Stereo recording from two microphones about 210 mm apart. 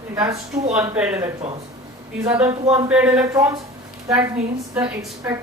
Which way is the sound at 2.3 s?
10° right (ahead or behind).